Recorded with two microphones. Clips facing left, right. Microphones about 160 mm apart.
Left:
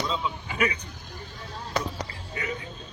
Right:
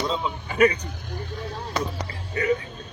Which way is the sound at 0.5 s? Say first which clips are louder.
Right 9 dB; 40° right (ahead or behind).